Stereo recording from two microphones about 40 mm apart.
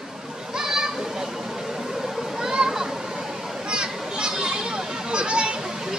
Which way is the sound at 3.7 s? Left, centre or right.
Right.